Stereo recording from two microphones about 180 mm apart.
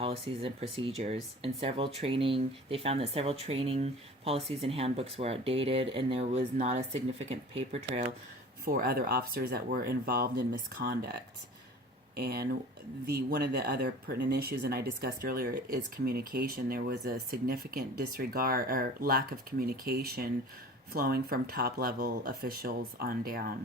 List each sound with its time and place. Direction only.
0.0 s speech: 30° right (ahead or behind)
8.6 s speech: 55° right (ahead or behind)